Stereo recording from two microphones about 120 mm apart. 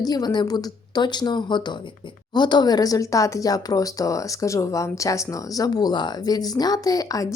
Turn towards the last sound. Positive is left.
turn(degrees=30)  # may be behind; listen again after turning